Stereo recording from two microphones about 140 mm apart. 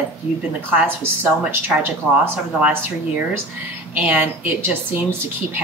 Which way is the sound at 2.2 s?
15° right (ahead or behind).